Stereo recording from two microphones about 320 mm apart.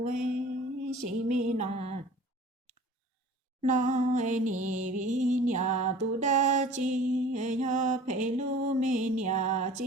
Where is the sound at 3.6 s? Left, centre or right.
Right.